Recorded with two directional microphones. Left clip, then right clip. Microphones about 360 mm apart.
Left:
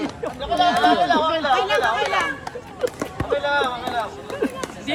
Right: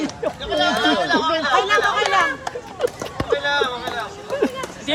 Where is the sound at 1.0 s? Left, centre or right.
Centre.